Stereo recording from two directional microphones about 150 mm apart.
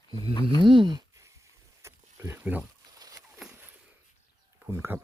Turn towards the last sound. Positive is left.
turn(degrees=-15)  # may be behind; listen again after turning